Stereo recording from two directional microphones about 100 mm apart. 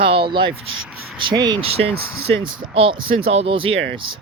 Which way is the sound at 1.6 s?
75° right (ahead or behind).